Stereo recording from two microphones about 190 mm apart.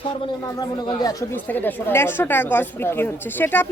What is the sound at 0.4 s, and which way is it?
A woman's voice, 20° left (ahead or behind).